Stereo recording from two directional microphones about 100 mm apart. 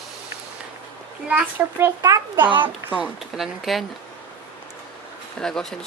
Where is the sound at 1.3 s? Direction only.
15° right (ahead or behind).